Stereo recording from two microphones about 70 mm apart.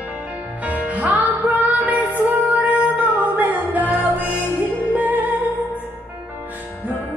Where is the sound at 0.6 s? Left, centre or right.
Right.